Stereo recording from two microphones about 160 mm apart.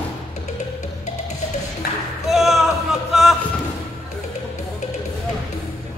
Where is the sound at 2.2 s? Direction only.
Centre (ahead or behind).